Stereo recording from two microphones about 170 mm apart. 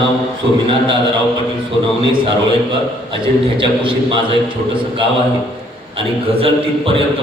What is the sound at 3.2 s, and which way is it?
A man's voice, 30° right (ahead or behind).